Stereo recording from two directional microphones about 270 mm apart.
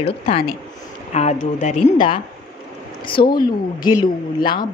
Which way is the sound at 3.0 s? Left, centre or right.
Centre.